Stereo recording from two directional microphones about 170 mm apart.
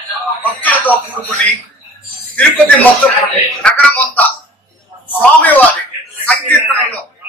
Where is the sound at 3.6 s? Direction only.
5° left (ahead or behind).